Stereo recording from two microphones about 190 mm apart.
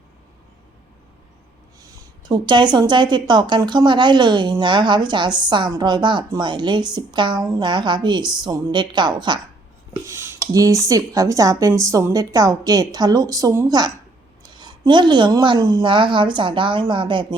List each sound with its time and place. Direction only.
1.8 s a woman's voice: 25° right (ahead or behind)